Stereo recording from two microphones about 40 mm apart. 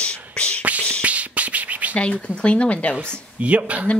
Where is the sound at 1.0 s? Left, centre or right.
Right.